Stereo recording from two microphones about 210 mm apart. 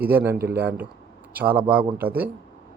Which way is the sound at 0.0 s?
10° right (ahead or behind).